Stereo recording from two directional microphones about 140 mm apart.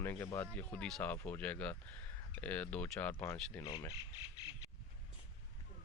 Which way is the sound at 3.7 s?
35° left (ahead or behind).